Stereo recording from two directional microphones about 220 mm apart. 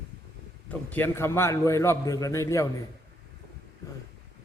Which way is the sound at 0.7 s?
10° left (ahead or behind).